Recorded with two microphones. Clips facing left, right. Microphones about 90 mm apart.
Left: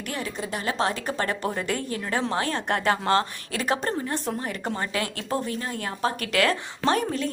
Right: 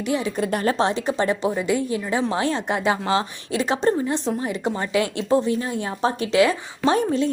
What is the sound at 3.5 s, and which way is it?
Speech, 25° right (ahead or behind).